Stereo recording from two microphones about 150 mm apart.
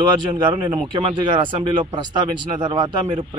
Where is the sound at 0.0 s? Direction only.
30° right (ahead or behind).